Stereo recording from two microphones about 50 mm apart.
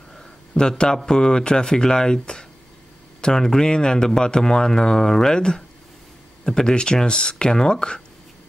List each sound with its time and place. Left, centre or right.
0.6 s speech: centre